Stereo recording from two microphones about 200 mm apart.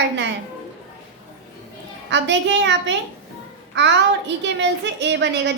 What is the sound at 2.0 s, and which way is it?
A woman's voice, 65° right (ahead or behind).